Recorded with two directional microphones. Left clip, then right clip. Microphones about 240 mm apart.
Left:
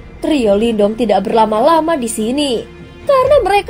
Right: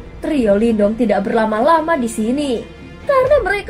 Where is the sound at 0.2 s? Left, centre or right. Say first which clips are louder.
Left 2 dB; left.